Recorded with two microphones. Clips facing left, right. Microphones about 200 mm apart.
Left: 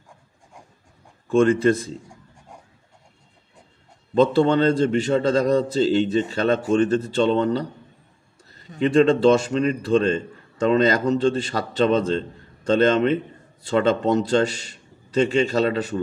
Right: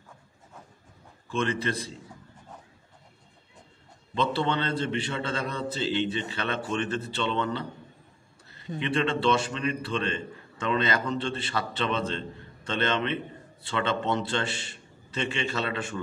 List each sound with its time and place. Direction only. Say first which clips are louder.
1.3 s speech: left 12 dB; 50° left (ahead or behind)
4.1 s a man's voice: left 10 dB; 45° left (ahead or behind)